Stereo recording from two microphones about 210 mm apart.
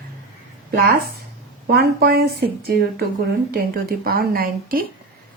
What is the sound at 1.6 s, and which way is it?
A woman's voice, 50° right (ahead or behind).